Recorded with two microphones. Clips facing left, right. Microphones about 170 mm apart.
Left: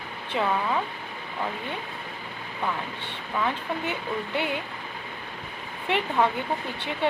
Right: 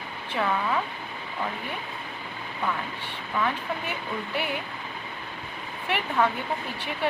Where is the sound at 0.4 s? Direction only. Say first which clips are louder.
Left 1 dB; 20° left (ahead or behind).